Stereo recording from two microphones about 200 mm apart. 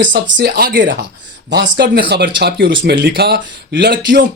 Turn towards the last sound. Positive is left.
turn(degrees=-50)  # may be behind; listen again after turning